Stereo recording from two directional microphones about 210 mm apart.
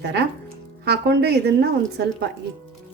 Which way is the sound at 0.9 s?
50° right (ahead or behind).